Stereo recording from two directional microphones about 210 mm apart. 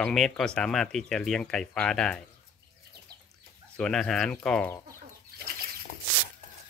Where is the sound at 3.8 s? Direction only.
Centre (ahead or behind).